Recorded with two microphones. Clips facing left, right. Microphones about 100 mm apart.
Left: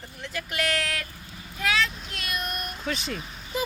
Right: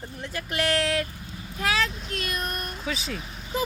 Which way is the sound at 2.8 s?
Centre (ahead or behind).